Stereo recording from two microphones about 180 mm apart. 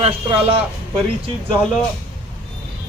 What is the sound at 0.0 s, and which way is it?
Speech, 30° right (ahead or behind).